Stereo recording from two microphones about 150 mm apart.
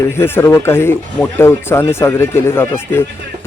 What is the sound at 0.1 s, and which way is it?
Speech, 15° left (ahead or behind).